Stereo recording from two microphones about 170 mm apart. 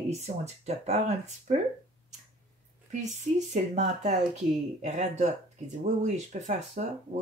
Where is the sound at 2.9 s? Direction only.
45° right (ahead or behind).